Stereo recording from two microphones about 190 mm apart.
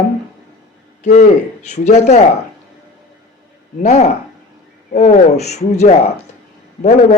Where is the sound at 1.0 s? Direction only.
40° left (ahead or behind).